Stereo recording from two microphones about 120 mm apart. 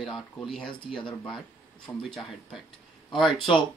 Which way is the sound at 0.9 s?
45° left (ahead or behind).